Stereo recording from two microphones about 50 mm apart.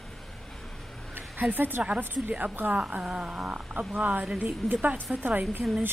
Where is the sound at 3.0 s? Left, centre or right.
Right.